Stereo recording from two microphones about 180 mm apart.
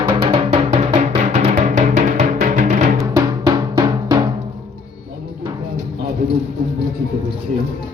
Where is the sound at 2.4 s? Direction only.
50° right (ahead or behind).